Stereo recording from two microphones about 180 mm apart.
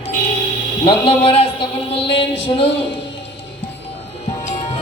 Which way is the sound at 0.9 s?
30° left (ahead or behind).